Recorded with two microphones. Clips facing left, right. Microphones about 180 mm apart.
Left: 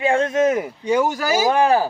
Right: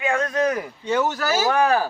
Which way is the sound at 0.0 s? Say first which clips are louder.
Left 4 dB; 25° left (ahead or behind).